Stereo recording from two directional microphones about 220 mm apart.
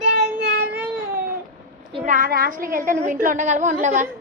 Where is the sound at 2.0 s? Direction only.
40° right (ahead or behind).